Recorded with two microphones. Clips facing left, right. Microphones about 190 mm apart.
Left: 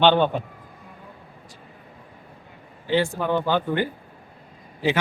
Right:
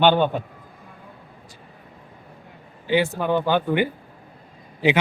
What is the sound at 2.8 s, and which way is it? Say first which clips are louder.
A man's voice: right 1 dB; 15° right (ahead or behind).